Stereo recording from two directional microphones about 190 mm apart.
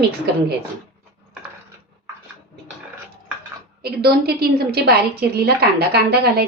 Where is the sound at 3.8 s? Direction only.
55° right (ahead or behind).